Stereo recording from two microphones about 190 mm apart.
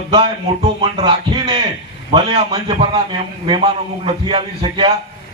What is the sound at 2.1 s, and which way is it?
A man's voice, 30° right (ahead or behind).